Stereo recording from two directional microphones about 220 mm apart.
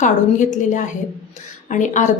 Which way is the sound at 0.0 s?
35° left (ahead or behind).